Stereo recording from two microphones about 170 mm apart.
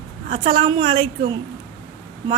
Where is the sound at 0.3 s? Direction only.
30° right (ahead or behind).